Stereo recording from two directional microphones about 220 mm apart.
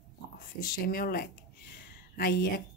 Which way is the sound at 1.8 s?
40° left (ahead or behind).